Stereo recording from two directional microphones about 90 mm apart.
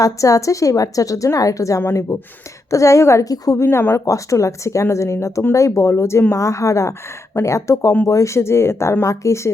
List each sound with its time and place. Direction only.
0.0 s a woman's voice: 35° left (ahead or behind)
3.6 s a woman's voice: 30° left (ahead or behind)